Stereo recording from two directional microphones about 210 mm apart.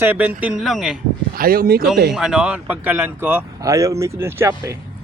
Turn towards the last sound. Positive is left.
turn(degrees=-15)  # may be behind; listen again after turning